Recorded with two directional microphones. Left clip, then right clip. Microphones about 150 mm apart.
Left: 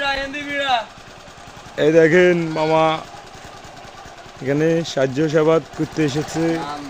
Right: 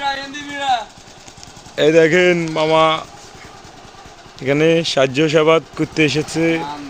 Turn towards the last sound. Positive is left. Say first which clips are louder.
# right 3 dB
turn(degrees=-5)  # may be behind; listen again after turning